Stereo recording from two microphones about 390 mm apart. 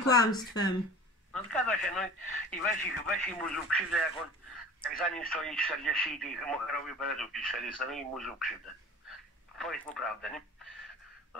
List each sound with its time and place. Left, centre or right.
0.0 s speech: centre
2.3 s speech: centre
2.8 s speech: centre
9.6 s speech: centre